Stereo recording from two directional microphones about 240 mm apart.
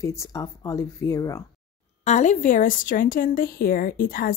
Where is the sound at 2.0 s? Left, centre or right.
Left.